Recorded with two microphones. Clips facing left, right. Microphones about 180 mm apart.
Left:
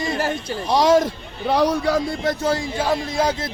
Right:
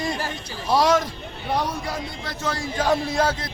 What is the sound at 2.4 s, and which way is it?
Speech, 30° left (ahead or behind).